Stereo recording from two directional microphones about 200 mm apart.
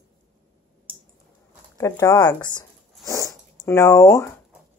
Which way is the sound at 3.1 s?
15° left (ahead or behind).